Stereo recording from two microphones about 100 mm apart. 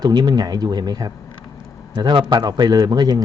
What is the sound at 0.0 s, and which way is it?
A man's voice, 45° right (ahead or behind).